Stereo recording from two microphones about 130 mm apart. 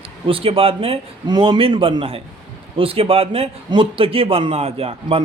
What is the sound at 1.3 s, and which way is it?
A man's voice, 35° right (ahead or behind).